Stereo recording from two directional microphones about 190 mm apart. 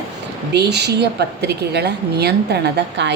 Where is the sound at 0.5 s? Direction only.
60° right (ahead or behind).